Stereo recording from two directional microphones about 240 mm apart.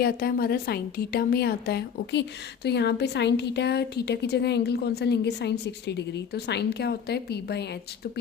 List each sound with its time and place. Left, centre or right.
0.0 s a woman's voice: left